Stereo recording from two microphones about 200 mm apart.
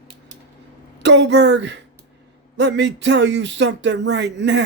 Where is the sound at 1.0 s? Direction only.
60° right (ahead or behind).